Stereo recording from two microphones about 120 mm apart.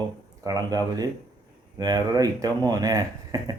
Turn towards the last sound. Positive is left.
turn(degrees=-30)  # may be behind; listen again after turning